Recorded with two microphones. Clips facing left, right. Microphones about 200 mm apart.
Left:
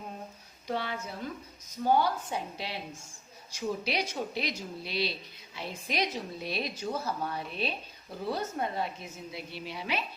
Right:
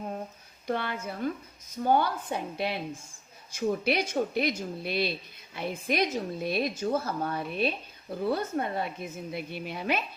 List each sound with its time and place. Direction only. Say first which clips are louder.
0.7 s a woman's voice: right 3 dB; 55° right (ahead or behind)